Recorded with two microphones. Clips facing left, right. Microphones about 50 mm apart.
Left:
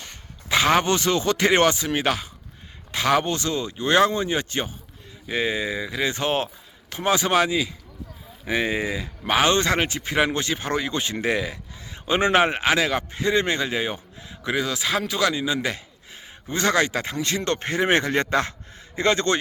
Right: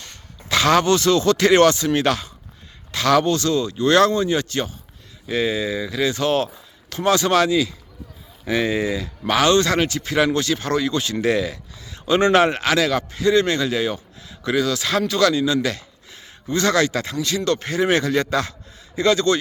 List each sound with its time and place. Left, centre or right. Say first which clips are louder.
0.0 s a man's voice: even; centre; by 19.4 s left